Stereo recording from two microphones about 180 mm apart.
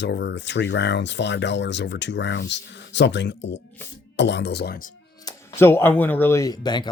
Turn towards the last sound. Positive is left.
turn(degrees=25)  # may be behind; listen again after turning